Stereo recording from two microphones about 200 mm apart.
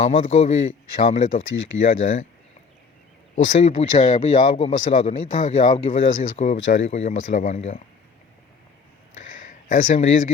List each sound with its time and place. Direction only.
0.2 s speech: 35° left (ahead or behind)
3.3 s speech: 40° left (ahead or behind)
9.5 s speech: 40° left (ahead or behind)